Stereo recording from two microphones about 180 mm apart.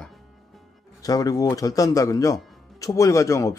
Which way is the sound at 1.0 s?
20° left (ahead or behind).